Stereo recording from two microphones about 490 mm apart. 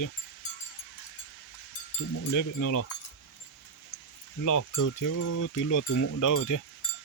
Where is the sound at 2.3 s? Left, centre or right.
Left.